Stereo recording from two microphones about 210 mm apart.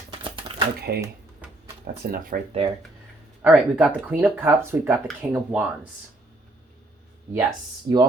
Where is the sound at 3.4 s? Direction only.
5° right (ahead or behind).